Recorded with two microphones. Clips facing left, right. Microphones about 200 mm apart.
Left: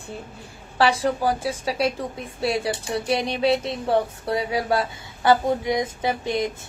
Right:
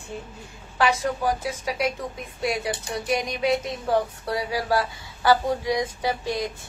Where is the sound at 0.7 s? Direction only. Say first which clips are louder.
Left 3 dB; 30° left (ahead or behind).